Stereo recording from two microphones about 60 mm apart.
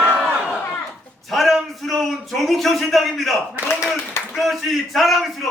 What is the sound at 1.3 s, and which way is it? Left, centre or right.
A man's voice, centre.